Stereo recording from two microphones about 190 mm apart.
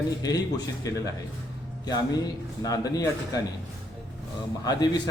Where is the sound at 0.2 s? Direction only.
20° left (ahead or behind).